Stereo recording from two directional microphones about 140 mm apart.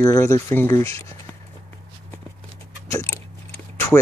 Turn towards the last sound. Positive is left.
turn(degrees=15)  # may be behind; listen again after turning